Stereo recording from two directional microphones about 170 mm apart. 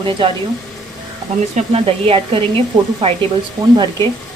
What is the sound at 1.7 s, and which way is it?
Speech, 35° right (ahead or behind).